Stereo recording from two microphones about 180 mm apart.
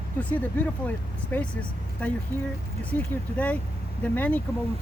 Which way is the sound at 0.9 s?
10° left (ahead or behind).